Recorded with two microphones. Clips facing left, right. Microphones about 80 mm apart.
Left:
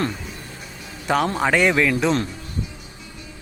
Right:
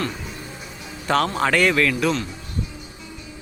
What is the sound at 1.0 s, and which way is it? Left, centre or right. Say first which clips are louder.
A man's voice: even; centre.